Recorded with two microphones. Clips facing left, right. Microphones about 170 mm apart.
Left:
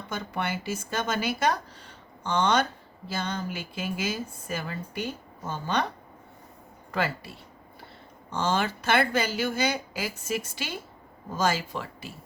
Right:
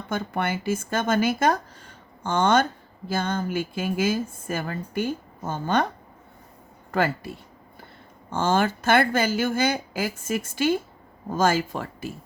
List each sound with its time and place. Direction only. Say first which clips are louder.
0.1 s a woman's voice: right 5 dB; 50° right (ahead or behind)
6.9 s a woman's voice: right 5 dB; 50° right (ahead or behind)